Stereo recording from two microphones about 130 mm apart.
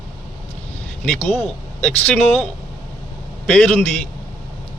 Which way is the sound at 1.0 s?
10° left (ahead or behind).